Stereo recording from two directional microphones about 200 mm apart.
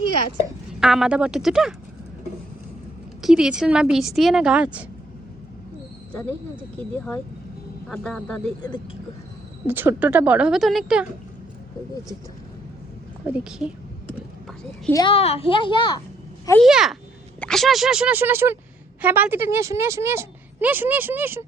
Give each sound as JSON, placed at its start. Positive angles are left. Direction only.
{"t": 0.7, "sound": "a woman's voice", "side_deg": 0}
{"t": 3.2, "sound": "a woman's voice", "side_deg": -5}
{"t": 6.9, "sound": "a woman's voice", "side_deg": 10}
{"t": 9.6, "sound": "speech", "side_deg": -10}
{"t": 13.2, "sound": "a woman's voice", "side_deg": -5}
{"t": 15.0, "sound": "a child's voice", "side_deg": 30}
{"t": 16.6, "sound": "a woman's voice", "side_deg": 0}